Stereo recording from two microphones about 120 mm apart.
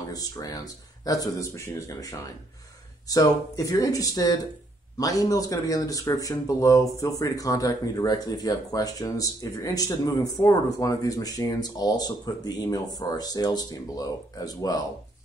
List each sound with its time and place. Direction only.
0.0 s speech: 30° left (ahead or behind)